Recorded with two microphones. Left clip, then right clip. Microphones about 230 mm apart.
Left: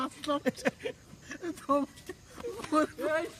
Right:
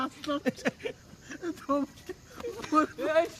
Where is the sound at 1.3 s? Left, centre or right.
Centre.